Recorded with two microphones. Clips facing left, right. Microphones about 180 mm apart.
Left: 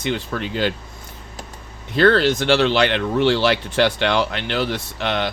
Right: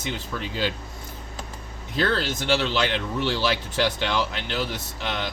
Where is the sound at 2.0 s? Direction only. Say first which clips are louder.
Left 9 dB; 70° left (ahead or behind).